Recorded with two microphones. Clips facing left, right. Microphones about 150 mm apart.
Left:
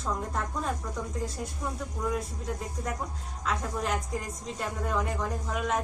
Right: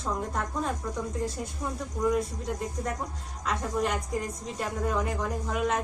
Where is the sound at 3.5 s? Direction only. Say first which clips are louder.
Right 2 dB; centre (ahead or behind).